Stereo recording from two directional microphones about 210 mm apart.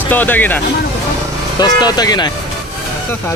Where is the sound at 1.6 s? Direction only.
20° left (ahead or behind).